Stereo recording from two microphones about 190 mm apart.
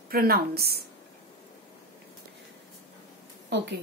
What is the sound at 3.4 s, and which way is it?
Speech, 65° right (ahead or behind).